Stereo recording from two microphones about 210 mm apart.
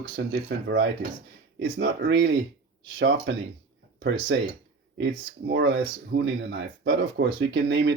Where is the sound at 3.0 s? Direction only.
65° right (ahead or behind).